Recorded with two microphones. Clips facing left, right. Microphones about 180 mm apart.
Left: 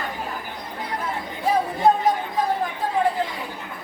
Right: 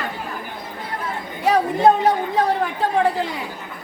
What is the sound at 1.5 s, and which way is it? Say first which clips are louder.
Chatter: right 4 dB; 75° right (ahead or behind).